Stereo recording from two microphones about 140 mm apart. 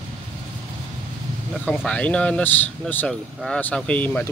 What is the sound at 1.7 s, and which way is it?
Speech, 10° left (ahead or behind).